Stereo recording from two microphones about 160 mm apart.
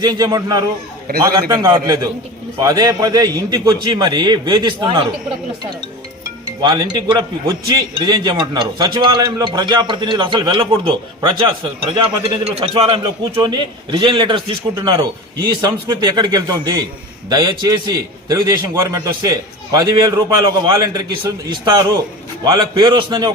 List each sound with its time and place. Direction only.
0.0 s a man's voice: 25° right (ahead or behind)
6.4 s a man's voice: 25° right (ahead or behind)